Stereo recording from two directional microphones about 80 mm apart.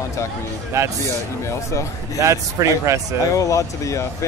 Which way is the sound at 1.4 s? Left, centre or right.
Left.